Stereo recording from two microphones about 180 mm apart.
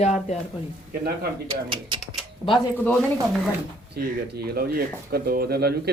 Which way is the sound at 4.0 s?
60° right (ahead or behind).